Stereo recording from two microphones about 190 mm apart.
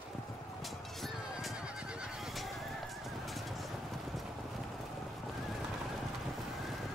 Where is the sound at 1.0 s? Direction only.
Centre (ahead or behind).